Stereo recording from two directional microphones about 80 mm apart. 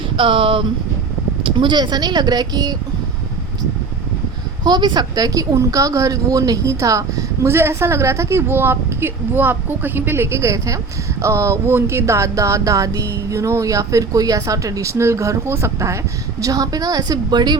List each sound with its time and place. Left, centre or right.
0.2 s speech: right
1.5 s speech: right
4.6 s a woman's voice: right
16.4 s a woman's voice: right